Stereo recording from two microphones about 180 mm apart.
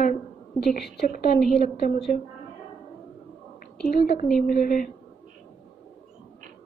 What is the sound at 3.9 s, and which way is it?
A woman's voice, 60° left (ahead or behind).